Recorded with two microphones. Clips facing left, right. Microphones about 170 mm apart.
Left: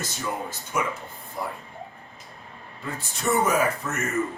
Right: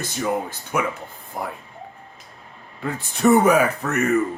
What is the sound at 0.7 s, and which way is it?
Speech, 65° right (ahead or behind).